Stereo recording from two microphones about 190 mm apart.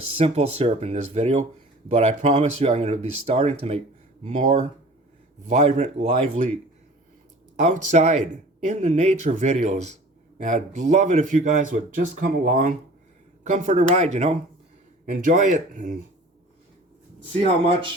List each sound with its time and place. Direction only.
0.2 s speech: 35° right (ahead or behind)
7.6 s speech: 40° right (ahead or behind)
17.4 s speech: 30° right (ahead or behind)